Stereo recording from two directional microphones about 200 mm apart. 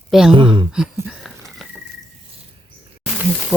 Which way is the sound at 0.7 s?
Centre (ahead or behind).